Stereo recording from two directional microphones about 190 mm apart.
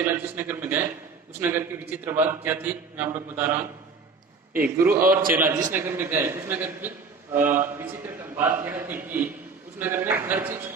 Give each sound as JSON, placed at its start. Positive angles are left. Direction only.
{"t": 0.0, "sound": "a man's voice", "side_deg": -10}